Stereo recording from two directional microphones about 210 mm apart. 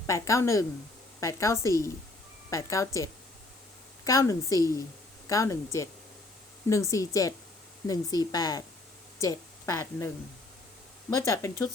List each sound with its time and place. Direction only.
0.1 s speech: 15° left (ahead or behind)
6.9 s a woman's voice: 15° left (ahead or behind)
11.1 s speech: 15° left (ahead or behind)